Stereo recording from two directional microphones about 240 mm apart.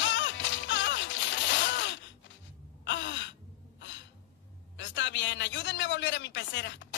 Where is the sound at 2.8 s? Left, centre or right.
Left.